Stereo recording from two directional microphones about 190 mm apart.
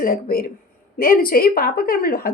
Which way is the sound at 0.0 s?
50° left (ahead or behind).